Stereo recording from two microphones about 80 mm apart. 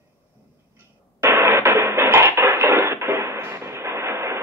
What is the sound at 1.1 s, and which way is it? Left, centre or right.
Music, right.